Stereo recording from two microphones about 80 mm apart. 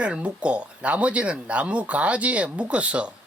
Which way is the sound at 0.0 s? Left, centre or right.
Centre.